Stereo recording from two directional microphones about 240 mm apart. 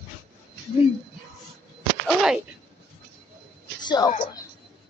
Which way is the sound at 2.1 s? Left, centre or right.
Centre.